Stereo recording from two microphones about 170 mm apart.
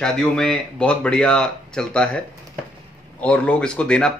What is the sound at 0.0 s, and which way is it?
Speech, 5° left (ahead or behind).